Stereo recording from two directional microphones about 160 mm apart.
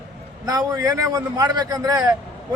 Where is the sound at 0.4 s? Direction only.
20° right (ahead or behind).